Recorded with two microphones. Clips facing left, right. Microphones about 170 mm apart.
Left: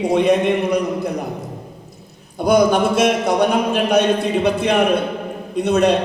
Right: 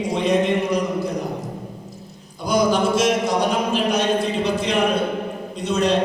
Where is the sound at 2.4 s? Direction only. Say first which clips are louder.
Left 4 dB; 60° left (ahead or behind).